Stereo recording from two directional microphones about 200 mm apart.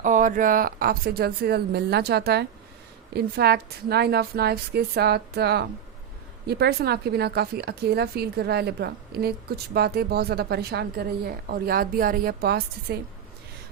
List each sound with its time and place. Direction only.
0.0 s speech: 40° right (ahead or behind)